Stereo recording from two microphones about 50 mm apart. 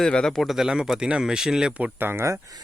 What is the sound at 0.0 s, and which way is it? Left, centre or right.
Speech, centre.